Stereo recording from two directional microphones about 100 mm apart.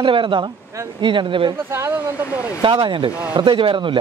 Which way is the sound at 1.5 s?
25° right (ahead or behind).